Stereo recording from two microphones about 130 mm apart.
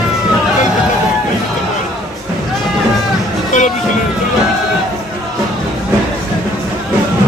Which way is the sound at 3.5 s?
75° left (ahead or behind).